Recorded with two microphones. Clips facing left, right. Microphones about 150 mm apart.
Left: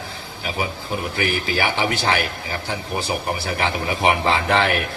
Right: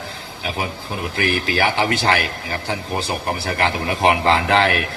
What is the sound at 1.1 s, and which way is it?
A man's voice, 75° right (ahead or behind).